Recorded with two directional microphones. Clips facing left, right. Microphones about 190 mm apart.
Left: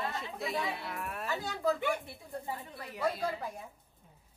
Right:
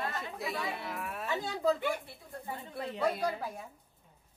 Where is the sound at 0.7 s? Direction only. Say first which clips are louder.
Even; centre (ahead or behind).